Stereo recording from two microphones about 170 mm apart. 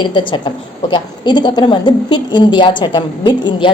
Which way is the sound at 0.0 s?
30° left (ahead or behind).